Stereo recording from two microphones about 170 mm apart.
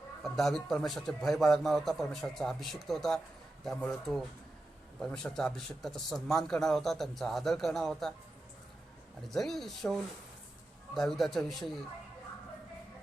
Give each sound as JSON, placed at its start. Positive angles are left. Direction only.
{"t": 0.2, "sound": "a man's voice", "side_deg": 0}
{"t": 9.2, "sound": "a man's voice", "side_deg": 0}